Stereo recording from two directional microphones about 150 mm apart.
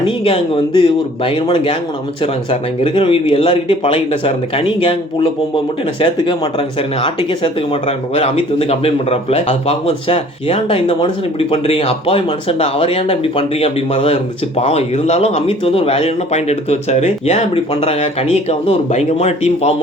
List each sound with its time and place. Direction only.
0.0 s speech: 35° left (ahead or behind)